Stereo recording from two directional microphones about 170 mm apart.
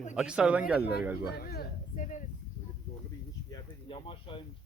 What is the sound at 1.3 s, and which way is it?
Speech, 65° left (ahead or behind).